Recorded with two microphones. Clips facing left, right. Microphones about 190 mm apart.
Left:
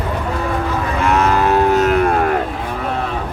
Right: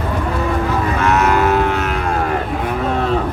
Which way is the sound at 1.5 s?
40° left (ahead or behind).